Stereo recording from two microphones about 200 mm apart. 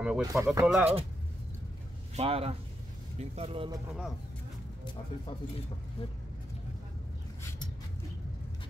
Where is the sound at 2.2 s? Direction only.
30° right (ahead or behind).